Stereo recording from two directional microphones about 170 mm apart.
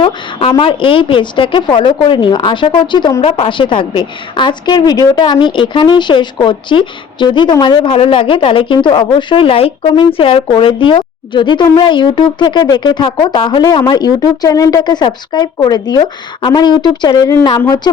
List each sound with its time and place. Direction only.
0.0 s a woman's voice: 30° left (ahead or behind)